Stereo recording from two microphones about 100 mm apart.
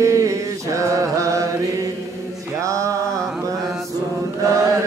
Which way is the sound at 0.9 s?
30° right (ahead or behind).